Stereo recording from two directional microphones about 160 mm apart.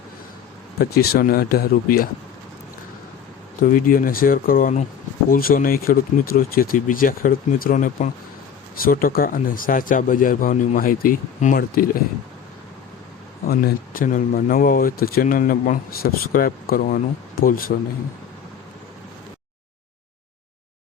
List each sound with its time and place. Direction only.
0.8 s speech: 75° left (ahead or behind)
3.6 s speech: 60° left (ahead or behind)
5.3 s speech: 65° left (ahead or behind)
13.5 s speech: 65° left (ahead or behind)